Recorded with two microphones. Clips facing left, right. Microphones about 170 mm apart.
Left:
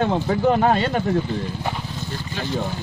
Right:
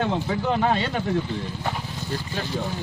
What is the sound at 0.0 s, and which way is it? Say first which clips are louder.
Speech: left 5 dB; 45° left (ahead or behind).